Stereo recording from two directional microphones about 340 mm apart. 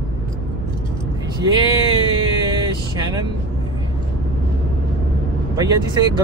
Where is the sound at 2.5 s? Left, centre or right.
Centre.